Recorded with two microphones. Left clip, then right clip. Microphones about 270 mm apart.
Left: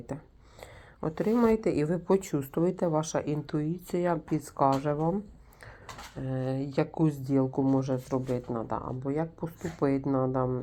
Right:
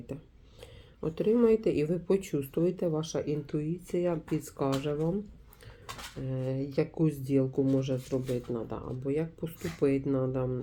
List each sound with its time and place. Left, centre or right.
1.0 s speech: centre
6.2 s speech: centre
9.0 s speech: centre
10.1 s speech: centre